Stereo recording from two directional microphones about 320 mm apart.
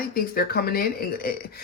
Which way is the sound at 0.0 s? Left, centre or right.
Left.